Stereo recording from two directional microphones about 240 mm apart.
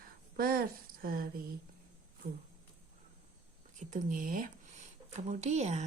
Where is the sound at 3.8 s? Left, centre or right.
Right.